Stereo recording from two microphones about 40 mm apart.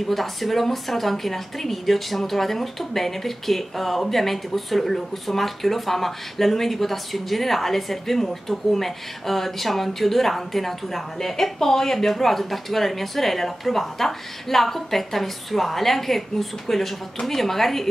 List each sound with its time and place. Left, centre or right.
0.1 s a woman's voice: centre